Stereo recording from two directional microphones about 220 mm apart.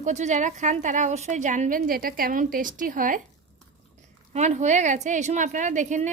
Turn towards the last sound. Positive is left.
turn(degrees=-35)  # may be behind; listen again after turning